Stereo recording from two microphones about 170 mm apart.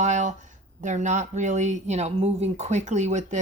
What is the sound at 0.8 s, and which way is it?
Speech, 45° right (ahead or behind).